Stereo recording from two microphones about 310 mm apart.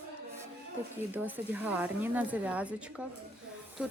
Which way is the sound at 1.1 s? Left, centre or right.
Centre.